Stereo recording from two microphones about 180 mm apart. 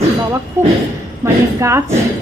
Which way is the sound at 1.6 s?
15° right (ahead or behind).